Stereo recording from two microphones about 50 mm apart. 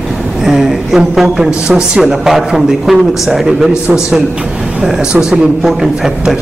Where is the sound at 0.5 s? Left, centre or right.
Centre.